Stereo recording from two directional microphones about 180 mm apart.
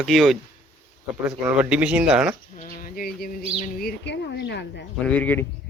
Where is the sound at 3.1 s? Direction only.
55° left (ahead or behind).